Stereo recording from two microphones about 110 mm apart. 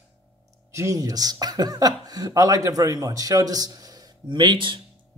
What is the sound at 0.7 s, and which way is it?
Speech, 30° right (ahead or behind).